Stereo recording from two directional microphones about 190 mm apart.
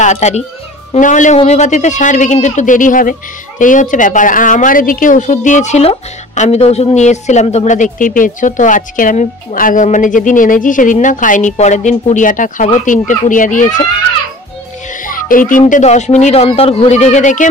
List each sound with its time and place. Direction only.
0.0 s a man's voice: 35° left (ahead or behind)
14.9 s music: 45° left (ahead or behind)
15.6 s a man's voice: 35° left (ahead or behind)